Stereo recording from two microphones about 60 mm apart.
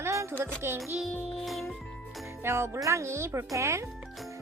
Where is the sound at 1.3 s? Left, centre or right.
Centre.